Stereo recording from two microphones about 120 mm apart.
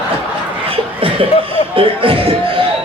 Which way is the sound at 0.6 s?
50° right (ahead or behind).